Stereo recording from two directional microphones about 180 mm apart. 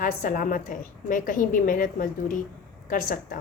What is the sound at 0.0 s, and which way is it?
A woman's voice, 45° left (ahead or behind).